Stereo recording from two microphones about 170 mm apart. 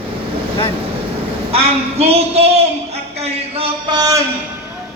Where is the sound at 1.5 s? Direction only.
35° right (ahead or behind).